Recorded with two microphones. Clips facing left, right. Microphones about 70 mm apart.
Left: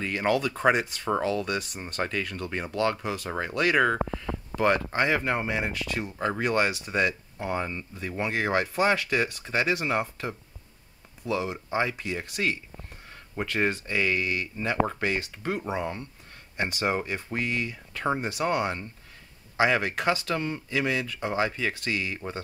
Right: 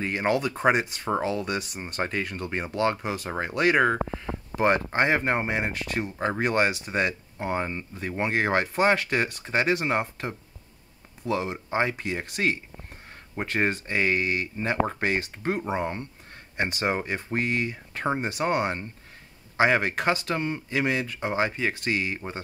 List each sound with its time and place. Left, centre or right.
0.0 s speech: right